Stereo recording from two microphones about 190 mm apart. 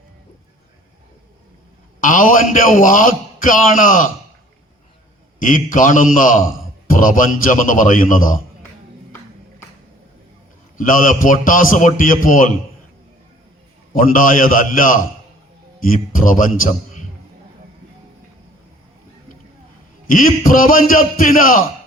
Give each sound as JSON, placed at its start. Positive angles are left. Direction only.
{"t": 2.0, "sound": "a man's voice", "side_deg": 45}
{"t": 5.4, "sound": "a man's voice", "side_deg": 45}
{"t": 10.8, "sound": "a man's voice", "side_deg": 45}
{"t": 13.9, "sound": "a man's voice", "side_deg": 45}
{"t": 20.1, "sound": "a man's voice", "side_deg": 45}